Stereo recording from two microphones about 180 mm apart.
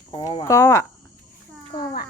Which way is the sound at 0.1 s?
30° left (ahead or behind).